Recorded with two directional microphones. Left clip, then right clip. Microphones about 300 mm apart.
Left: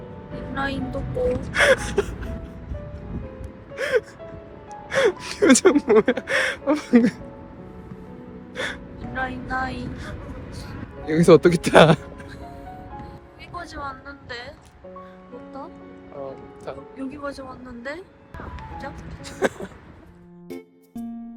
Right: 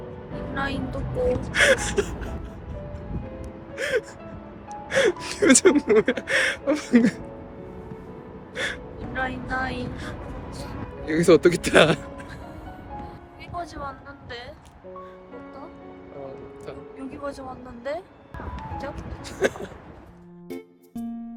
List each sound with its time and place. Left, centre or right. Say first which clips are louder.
0.5 s a woman's voice: left 2 dB; centre
1.3 s gasp: even; right
1.5 s speech: left 2 dB; centre
3.8 s speech: left 3 dB; centre
8.5 s gasp: even; centre
10.6 s speech: right 2 dB; centre
13.6 s a woman's voice: even; centre
17.1 s speech: even; centre
19.2 s a sound: left 1 dB; left